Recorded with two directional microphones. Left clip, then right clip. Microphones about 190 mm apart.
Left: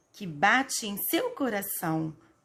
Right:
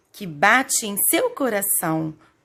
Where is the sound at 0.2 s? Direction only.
35° right (ahead or behind).